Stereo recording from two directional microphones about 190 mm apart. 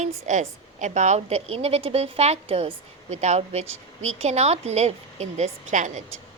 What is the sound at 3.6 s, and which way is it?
Speech, 90° right.